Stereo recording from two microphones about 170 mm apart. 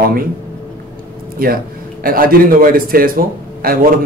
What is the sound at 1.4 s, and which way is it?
A man's voice, 60° right (ahead or behind).